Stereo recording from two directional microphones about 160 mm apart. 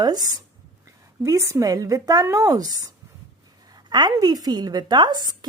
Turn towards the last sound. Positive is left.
turn(degrees=-25)  # may be behind; listen again after turning